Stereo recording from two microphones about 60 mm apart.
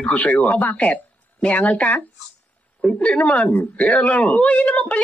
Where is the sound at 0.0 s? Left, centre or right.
Left.